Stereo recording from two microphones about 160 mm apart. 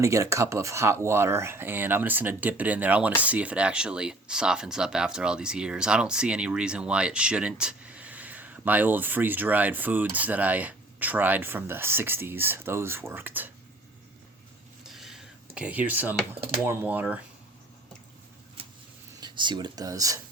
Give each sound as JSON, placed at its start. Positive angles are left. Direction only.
{"t": 0.0, "sound": "speech", "side_deg": -20}
{"t": 14.8, "sound": "a sound", "side_deg": 0}
{"t": 16.6, "sound": "speech", "side_deg": -10}
{"t": 19.2, "sound": "speech", "side_deg": -30}